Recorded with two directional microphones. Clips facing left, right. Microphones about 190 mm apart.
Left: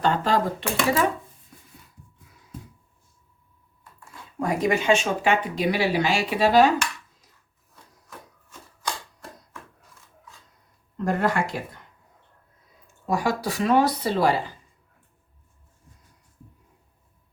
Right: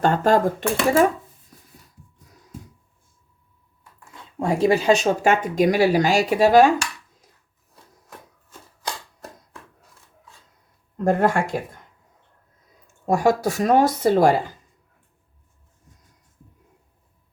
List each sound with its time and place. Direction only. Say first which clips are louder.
0.0 s speech: right 5 dB; 50° right (ahead or behind)
4.1 s speech: right 3 dB; 30° right (ahead or behind); by 6.7 s 50° right (ahead or behind)
10.9 s speech: right 4 dB; 50° right (ahead or behind)
13.1 s speech: right 6 dB; 45° right (ahead or behind)